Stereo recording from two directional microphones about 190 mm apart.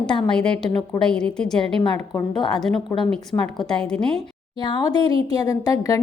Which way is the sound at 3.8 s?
5° left (ahead or behind).